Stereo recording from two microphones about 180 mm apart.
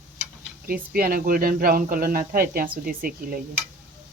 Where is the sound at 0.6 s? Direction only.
55° right (ahead or behind).